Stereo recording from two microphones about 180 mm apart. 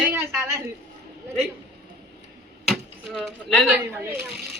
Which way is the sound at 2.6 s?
Centre (ahead or behind).